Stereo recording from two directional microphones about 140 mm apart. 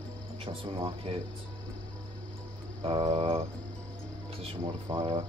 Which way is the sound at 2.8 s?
40° right (ahead or behind).